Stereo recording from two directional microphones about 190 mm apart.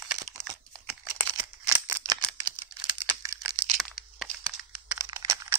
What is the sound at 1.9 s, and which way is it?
Scissors, 10° right (ahead or behind).